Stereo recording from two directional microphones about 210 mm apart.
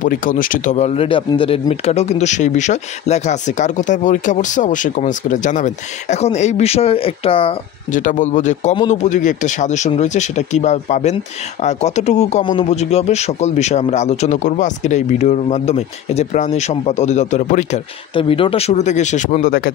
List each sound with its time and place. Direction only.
0.0 s speech: 40° left (ahead or behind)
7.9 s speech: 40° left (ahead or behind)
18.1 s speech: 25° left (ahead or behind); by 19.7 s 45° left (ahead or behind)